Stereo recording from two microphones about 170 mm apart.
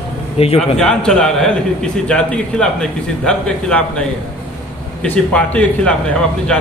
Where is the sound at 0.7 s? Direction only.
5° left (ahead or behind).